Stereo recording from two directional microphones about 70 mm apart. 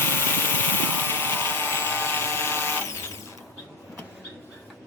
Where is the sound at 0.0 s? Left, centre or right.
Left.